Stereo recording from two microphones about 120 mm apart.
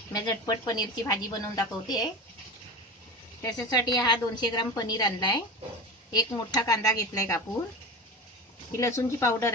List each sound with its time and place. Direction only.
0.1 s a woman's voice: 35° left (ahead or behind)
3.4 s a woman's voice: 35° left (ahead or behind)
8.7 s a woman's voice: 25° left (ahead or behind)